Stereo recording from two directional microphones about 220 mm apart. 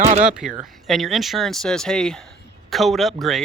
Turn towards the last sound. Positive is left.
turn(degrees=0)  # may be behind; listen again after turning